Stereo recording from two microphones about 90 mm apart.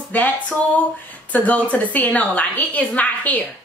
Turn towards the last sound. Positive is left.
turn(degrees=15)  # may be behind; listen again after turning